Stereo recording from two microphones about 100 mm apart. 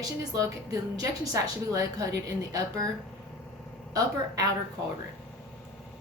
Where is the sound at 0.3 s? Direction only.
35° right (ahead or behind).